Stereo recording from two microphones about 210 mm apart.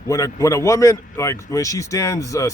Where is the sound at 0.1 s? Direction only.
15° left (ahead or behind).